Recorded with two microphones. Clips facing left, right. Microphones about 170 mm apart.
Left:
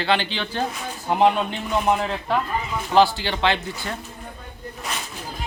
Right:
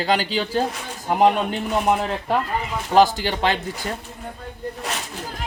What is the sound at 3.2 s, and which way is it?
Speech, 45° right (ahead or behind).